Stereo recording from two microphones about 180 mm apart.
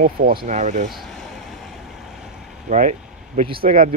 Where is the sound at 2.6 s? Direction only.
45° right (ahead or behind).